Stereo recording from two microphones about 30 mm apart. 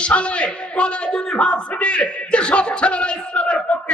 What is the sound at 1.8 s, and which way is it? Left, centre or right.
A man's voice, left.